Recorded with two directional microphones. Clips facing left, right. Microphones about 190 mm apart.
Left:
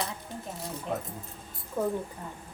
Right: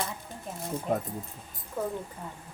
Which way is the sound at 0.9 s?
45° right (ahead or behind).